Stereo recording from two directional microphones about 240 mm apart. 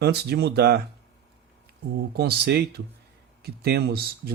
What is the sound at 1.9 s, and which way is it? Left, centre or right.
Speech, right.